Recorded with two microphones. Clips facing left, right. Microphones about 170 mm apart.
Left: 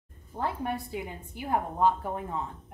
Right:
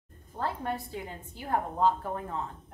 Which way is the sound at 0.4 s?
15° left (ahead or behind).